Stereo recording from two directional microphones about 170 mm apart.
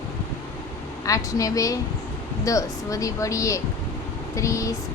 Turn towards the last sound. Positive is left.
turn(degrees=20)  # may be behind; listen again after turning